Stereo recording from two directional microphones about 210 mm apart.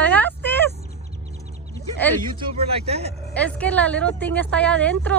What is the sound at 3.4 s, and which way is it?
A woman's voice, 5° left (ahead or behind).